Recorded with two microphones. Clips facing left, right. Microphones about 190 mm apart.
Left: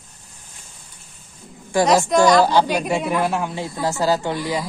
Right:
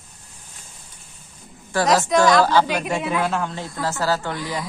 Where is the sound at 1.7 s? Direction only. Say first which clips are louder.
Left 2 dB; 15° left (ahead or behind).